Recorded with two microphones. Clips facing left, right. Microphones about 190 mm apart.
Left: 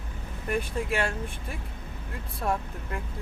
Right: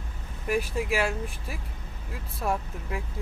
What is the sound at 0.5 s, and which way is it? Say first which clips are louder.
Speech: right 2 dB; 5° right (ahead or behind).